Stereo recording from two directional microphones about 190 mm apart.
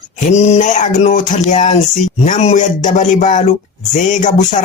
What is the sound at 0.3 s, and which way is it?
Speech, 35° left (ahead or behind).